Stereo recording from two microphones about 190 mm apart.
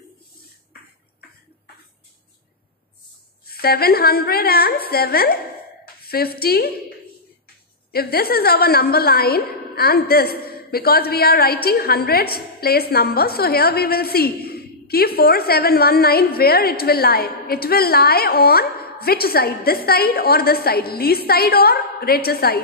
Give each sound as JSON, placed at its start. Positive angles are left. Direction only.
{"t": 3.4, "sound": "a woman's voice", "side_deg": 55}
{"t": 7.9, "sound": "a woman's voice", "side_deg": 55}